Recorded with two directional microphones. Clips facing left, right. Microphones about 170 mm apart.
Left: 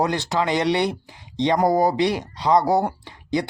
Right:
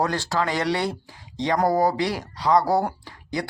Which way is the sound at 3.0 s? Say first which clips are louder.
Left 5 dB; 20° left (ahead or behind).